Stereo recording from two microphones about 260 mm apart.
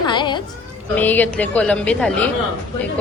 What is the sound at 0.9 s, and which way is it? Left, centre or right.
A woman's voice, centre.